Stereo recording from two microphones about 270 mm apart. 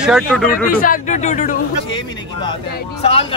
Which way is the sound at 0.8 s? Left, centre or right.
Left.